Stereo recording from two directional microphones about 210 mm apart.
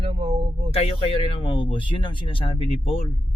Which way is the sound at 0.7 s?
30° left (ahead or behind).